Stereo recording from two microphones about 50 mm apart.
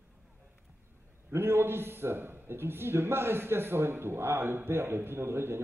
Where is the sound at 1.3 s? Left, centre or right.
Right.